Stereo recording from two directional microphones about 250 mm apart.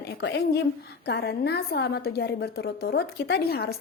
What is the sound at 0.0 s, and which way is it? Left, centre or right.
Speech, left.